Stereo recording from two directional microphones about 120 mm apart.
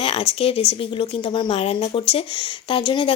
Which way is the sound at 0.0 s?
50° left (ahead or behind).